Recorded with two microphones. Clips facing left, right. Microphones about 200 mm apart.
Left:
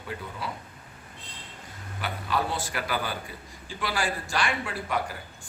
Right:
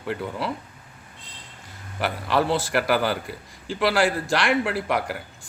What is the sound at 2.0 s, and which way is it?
A man's voice, 80° right.